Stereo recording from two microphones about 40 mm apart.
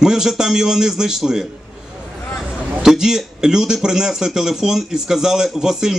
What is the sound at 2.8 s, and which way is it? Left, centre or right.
Speech, centre.